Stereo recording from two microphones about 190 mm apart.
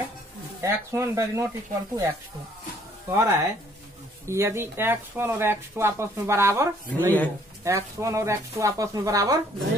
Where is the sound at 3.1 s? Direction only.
15° right (ahead or behind).